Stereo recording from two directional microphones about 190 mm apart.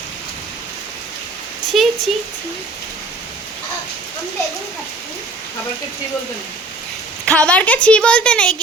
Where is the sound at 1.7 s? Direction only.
Centre (ahead or behind).